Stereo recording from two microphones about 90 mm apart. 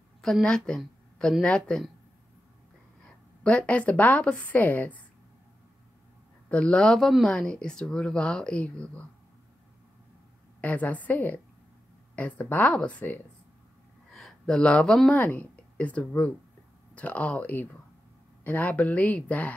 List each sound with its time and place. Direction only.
0.2 s a woman's voice: 5° left (ahead or behind)
3.1 s a woman's voice: 15° left (ahead or behind)
6.5 s speech: 10° left (ahead or behind)
10.6 s speech: 15° left (ahead or behind)
14.1 s speech: 5° left (ahead or behind)